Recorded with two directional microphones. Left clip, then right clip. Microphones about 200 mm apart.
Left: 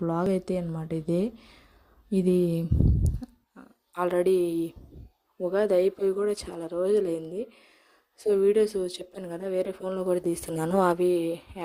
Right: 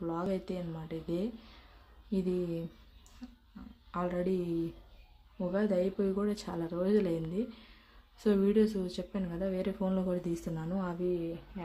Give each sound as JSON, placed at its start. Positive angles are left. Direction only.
{"t": 0.0, "sound": "a woman's voice", "side_deg": 35}
{"t": 10.3, "sound": "speech", "side_deg": 45}